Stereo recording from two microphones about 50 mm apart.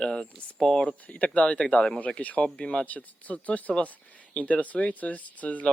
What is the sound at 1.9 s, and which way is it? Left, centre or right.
Speech, left.